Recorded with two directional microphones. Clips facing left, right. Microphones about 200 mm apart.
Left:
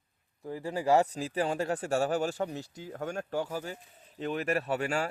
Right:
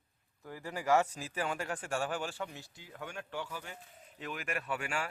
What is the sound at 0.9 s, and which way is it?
Speech, 35° left (ahead or behind).